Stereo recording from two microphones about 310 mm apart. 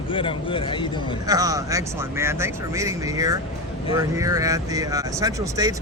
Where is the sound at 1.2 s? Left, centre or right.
Centre.